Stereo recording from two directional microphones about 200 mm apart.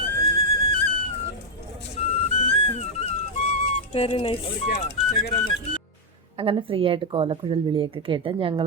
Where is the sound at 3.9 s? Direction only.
30° left (ahead or behind).